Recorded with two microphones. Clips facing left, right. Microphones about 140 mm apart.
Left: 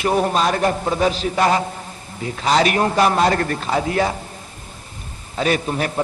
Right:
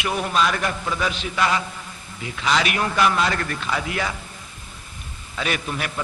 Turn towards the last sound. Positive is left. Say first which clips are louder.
# left 7 dB
turn(degrees=35)  # may be behind; listen again after turning